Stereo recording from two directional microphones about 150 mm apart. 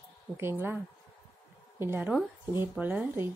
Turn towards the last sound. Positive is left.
turn(degrees=-15)  # may be behind; listen again after turning